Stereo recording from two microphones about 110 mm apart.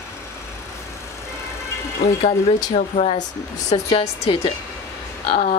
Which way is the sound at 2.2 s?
85° left.